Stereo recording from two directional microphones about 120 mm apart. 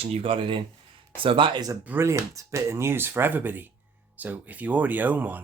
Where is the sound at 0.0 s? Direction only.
50° right (ahead or behind).